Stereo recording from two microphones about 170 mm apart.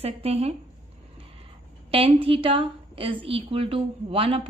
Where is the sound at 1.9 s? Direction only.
35° right (ahead or behind).